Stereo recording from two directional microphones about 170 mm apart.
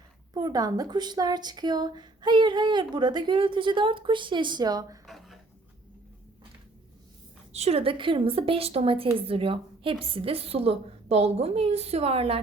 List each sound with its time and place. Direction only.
0.3 s speech: 25° right (ahead or behind)
5.0 s a sound: centre (ahead or behind)
7.5 s a woman's voice: 35° right (ahead or behind)